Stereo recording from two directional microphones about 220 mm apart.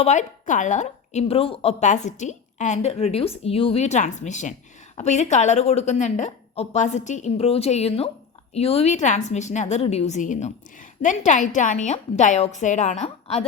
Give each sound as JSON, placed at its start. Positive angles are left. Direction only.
{"t": 0.0, "sound": "a woman's voice", "side_deg": 35}